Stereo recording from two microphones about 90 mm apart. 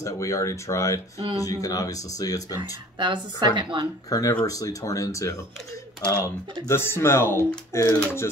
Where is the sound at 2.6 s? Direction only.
60° right (ahead or behind).